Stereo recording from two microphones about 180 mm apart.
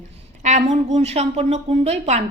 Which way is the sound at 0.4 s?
40° right (ahead or behind).